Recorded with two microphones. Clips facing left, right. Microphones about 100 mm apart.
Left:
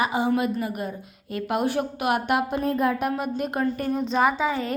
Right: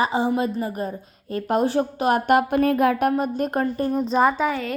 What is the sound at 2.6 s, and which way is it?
Speech, 70° right (ahead or behind).